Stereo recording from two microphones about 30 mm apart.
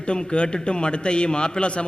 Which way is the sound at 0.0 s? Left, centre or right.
Left.